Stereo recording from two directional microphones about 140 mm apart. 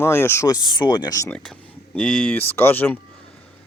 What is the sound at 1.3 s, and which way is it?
Speech, 10° left (ahead or behind).